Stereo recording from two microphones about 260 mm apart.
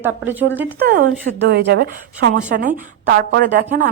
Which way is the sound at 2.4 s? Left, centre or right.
Right.